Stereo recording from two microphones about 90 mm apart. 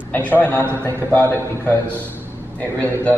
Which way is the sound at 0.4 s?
25° left (ahead or behind).